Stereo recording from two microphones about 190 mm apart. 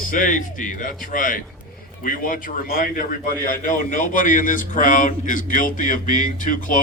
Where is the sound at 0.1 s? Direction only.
45° left (ahead or behind).